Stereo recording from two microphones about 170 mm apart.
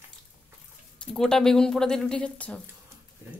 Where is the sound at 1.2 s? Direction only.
5° left (ahead or behind).